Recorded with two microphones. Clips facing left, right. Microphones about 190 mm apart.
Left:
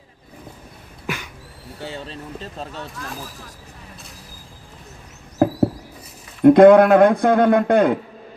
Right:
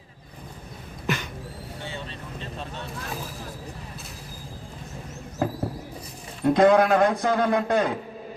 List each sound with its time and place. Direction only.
1.0 s a sound: 10° left (ahead or behind)
1.8 s speech: 40° left (ahead or behind)
5.4 s rodents: 60° left (ahead or behind)
6.4 s speech: 55° left (ahead or behind)